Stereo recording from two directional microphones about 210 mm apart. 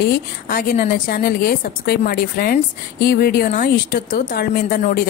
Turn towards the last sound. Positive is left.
turn(degrees=45)  # may be behind; listen again after turning